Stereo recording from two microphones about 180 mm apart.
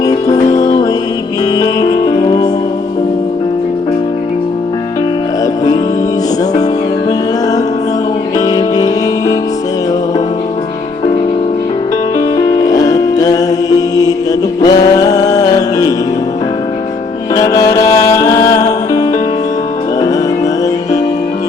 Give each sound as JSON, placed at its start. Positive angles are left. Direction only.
{"t": 0.0, "sound": "music", "side_deg": 20}
{"t": 8.4, "sound": "music", "side_deg": 20}
{"t": 12.4, "sound": "music", "side_deg": 20}
{"t": 17.3, "sound": "music", "side_deg": 20}
{"t": 17.8, "sound": "music", "side_deg": 40}
{"t": 18.1, "sound": "music", "side_deg": 20}